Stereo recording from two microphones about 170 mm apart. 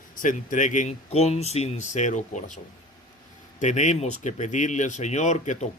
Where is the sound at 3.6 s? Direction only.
45° left (ahead or behind).